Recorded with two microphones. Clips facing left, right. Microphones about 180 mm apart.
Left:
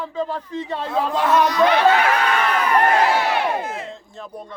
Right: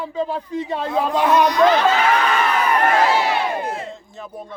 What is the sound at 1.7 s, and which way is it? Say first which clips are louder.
Speech: even; 60° left (ahead or behind).